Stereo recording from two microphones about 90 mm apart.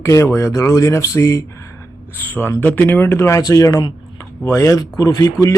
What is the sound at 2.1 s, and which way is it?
Speech, 20° left (ahead or behind).